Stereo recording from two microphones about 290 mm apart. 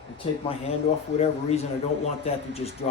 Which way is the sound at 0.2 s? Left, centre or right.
Centre.